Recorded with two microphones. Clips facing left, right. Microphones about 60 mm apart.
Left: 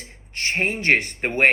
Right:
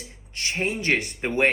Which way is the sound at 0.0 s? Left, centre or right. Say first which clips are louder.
Left 4 dB; left.